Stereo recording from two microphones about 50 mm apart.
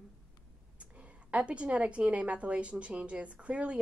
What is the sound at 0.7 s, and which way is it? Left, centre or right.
A woman's voice, right.